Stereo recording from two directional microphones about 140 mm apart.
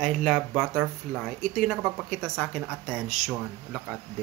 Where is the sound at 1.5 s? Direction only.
Centre (ahead or behind).